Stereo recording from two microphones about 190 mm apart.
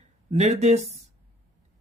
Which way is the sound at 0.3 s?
35° right (ahead or behind).